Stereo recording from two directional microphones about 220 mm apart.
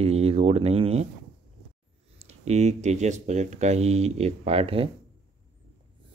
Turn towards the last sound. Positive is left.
turn(degrees=-25)  # may be behind; listen again after turning